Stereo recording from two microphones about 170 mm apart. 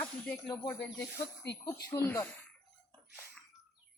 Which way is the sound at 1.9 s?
15° left (ahead or behind).